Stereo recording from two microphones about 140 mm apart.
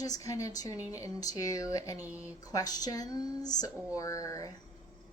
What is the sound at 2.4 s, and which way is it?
Speech, 25° left (ahead or behind).